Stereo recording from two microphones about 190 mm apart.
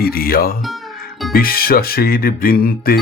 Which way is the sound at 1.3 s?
50° left (ahead or behind).